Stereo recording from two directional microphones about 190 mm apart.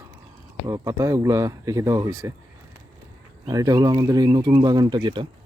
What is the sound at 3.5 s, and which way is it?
Speech, 20° right (ahead or behind).